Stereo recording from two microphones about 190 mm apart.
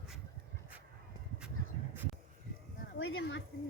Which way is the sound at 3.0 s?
85° left.